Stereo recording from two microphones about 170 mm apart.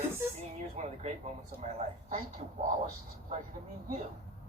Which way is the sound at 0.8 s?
45° right (ahead or behind).